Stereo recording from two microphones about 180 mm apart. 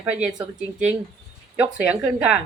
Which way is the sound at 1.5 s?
5° right (ahead or behind).